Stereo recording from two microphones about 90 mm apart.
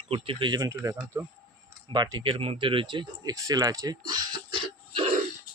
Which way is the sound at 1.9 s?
50° right (ahead or behind).